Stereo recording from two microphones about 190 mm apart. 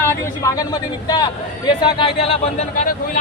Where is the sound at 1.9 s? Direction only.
30° left (ahead or behind).